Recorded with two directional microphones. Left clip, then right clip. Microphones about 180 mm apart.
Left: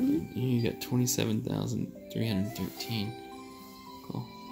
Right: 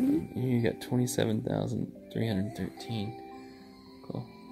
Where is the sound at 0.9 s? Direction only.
10° left (ahead or behind).